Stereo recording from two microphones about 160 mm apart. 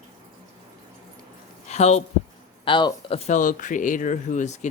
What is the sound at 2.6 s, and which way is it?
Speech, 30° left (ahead or behind).